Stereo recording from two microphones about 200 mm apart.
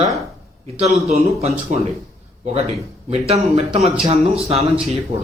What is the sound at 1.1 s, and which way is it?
Speech, 30° right (ahead or behind).